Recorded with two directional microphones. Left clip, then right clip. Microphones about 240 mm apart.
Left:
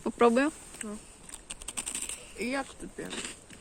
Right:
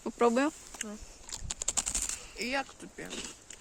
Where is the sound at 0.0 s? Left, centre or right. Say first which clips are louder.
Left 3 dB; centre.